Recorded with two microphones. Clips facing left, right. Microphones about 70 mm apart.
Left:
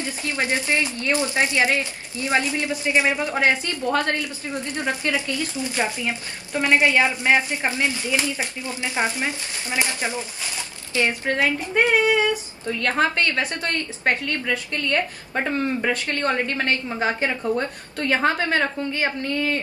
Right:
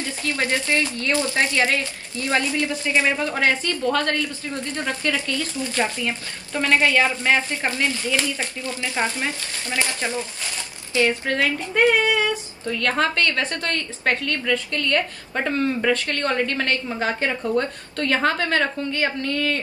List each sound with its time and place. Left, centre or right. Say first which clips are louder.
0.0 s a woman's voice: right 1 dB; left